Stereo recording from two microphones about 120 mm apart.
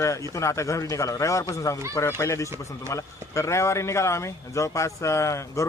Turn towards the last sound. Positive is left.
turn(degrees=25)  # may be behind; listen again after turning